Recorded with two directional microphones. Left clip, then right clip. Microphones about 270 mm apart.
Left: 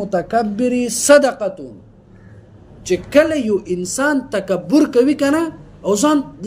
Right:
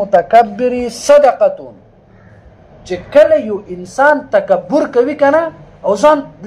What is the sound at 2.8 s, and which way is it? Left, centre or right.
A woman's voice, left.